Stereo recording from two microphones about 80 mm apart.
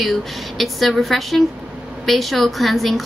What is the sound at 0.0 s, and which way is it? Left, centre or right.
Speech, centre.